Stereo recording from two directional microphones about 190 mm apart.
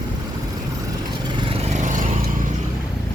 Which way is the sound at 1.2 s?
30° right (ahead or behind).